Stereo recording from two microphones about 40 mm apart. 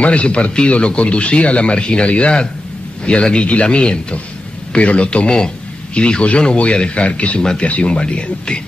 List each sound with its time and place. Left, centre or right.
0.0 s a man's voice: left